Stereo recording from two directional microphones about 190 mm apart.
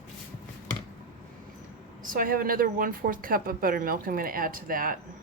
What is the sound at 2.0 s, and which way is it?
Speech, 50° right (ahead or behind).